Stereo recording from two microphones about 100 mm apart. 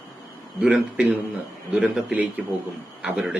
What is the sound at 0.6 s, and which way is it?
Speech, 15° right (ahead or behind).